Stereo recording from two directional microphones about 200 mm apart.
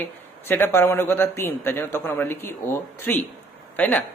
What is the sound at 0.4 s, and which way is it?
A man's voice, 10° left (ahead or behind).